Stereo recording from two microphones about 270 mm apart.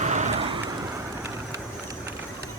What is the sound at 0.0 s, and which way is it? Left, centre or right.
Vehicle, right.